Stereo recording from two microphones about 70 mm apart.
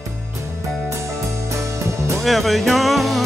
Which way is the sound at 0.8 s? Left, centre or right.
Right.